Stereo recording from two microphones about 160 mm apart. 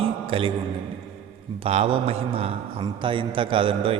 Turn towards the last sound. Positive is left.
turn(degrees=-35)  # may be behind; listen again after turning